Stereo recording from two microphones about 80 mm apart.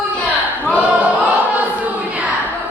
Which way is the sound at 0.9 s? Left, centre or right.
Centre.